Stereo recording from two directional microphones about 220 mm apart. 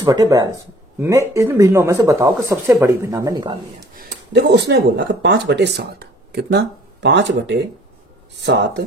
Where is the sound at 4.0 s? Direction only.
45° right (ahead or behind).